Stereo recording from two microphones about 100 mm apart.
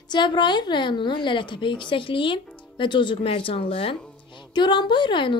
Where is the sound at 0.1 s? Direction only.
50° left (ahead or behind); by 3.9 s 65° left (ahead or behind).